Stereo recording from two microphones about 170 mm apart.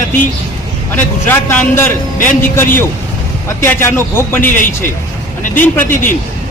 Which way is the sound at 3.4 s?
15° left (ahead or behind).